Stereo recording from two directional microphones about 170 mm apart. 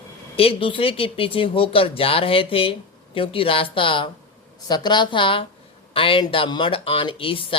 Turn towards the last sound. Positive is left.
turn(degrees=30)  # may be behind; listen again after turning